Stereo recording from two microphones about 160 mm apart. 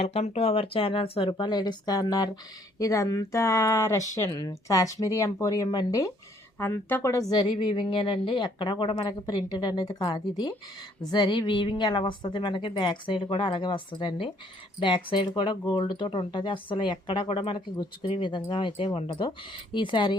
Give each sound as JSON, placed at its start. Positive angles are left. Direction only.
{"t": 0.0, "sound": "speech", "side_deg": 40}